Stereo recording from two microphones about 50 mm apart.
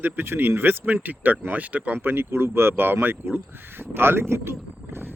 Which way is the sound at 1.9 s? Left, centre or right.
Right.